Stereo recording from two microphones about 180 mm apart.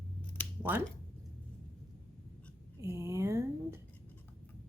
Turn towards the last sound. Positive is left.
turn(degrees=-15)  # may be behind; listen again after turning